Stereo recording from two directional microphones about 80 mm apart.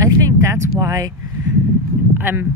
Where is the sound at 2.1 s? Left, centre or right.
Right.